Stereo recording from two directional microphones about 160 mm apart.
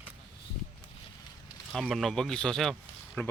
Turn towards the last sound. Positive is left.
turn(degrees=10)  # may be behind; listen again after turning